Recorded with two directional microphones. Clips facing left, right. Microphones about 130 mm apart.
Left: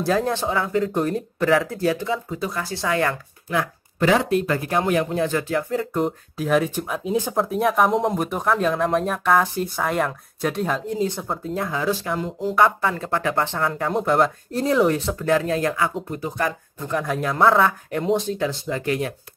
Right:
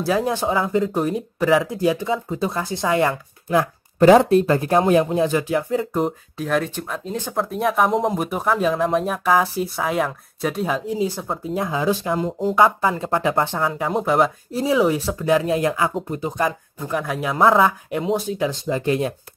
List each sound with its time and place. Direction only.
0.0 s speech: centre (ahead or behind)
0.3 s speech: 15° right (ahead or behind)
0.8 s speech: 5° right (ahead or behind); by 3.6 s 25° right (ahead or behind)
4.0 s speech: 35° right (ahead or behind); by 5.7 s 15° right (ahead or behind)
5.7 s speech: 5° right (ahead or behind)
11.5 s speech: 20° right (ahead or behind)
12.3 s speech: 40° right (ahead or behind)
12.8 s speech: 20° right (ahead or behind)
16.7 s speech: 5° right (ahead or behind)
17.6 s speech: 15° right (ahead or behind)
18.4 s speech: 15° right (ahead or behind)